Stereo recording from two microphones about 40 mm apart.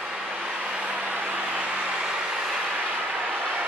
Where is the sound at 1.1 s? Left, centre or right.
Right.